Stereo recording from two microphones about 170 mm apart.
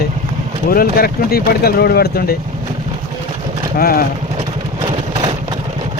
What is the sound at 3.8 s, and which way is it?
Speech, 60° left (ahead or behind).